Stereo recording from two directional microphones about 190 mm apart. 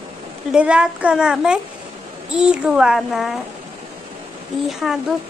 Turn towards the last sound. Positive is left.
turn(degrees=0)  # may be behind; listen again after turning